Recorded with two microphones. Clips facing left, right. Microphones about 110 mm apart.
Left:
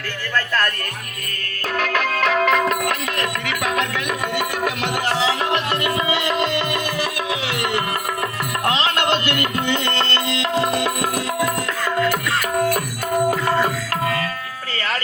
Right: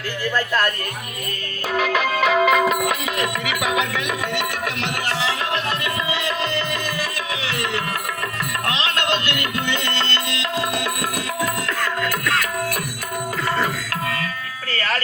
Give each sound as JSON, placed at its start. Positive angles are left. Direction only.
{"t": 0.3, "sound": "speech", "side_deg": -15}
{"t": 1.7, "sound": "music", "side_deg": -5}
{"t": 9.0, "sound": "music", "side_deg": 45}